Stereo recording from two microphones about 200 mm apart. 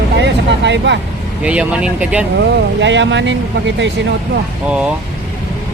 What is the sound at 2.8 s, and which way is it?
Speech, 65° right (ahead or behind).